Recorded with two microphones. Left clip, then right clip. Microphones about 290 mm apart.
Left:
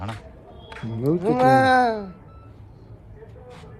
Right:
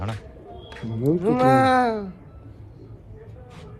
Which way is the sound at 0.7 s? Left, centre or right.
Centre.